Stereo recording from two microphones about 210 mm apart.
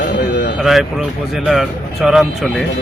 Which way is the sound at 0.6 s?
Centre (ahead or behind).